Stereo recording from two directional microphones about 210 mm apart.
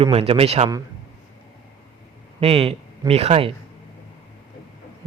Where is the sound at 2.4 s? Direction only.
25° right (ahead or behind).